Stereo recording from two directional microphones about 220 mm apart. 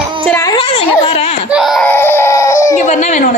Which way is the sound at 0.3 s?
15° left (ahead or behind).